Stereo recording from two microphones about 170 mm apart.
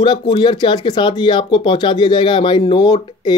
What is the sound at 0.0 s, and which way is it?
Speech, 30° left (ahead or behind).